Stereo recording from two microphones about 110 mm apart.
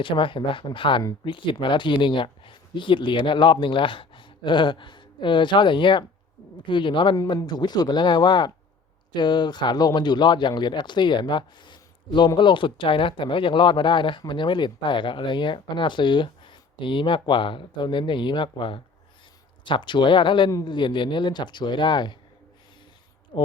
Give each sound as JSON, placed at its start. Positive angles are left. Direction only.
{"t": 0.0, "sound": "speech", "side_deg": 50}
{"t": 23.3, "sound": "speech", "side_deg": 40}